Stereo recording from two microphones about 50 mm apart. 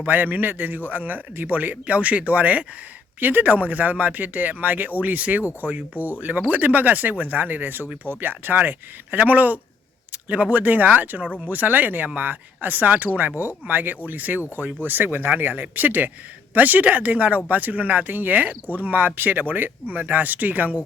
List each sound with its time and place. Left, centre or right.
0.0 s a man's voice: right
3.2 s a man's voice: right